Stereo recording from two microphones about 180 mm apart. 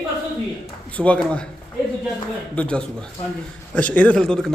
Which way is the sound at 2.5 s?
5° left (ahead or behind).